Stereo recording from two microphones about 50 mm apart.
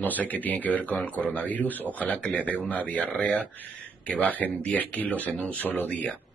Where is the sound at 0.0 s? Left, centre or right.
Left.